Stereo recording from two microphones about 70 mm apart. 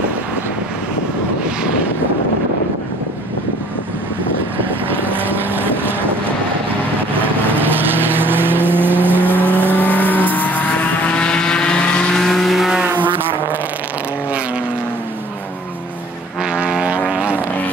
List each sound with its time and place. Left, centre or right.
4.9 s vehicle: right
7.4 s vehicle: right
9.8 s vehicle: left; by 12.8 s centre
17.1 s vehicle: centre